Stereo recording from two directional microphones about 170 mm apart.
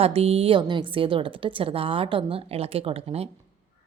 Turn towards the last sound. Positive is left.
turn(degrees=-35)  # may be behind; listen again after turning